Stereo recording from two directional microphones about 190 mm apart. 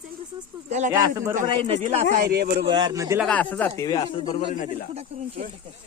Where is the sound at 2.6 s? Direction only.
20° right (ahead or behind).